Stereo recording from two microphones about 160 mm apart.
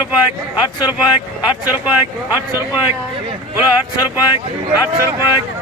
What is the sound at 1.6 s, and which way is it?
Speech, 10° right (ahead or behind).